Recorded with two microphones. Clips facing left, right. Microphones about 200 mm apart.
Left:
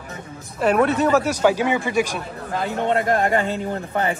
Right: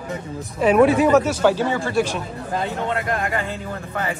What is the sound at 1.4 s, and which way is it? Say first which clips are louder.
Speech: even; 15° left (ahead or behind).